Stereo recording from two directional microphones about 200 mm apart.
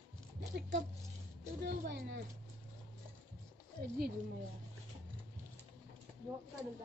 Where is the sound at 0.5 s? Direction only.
60° right (ahead or behind).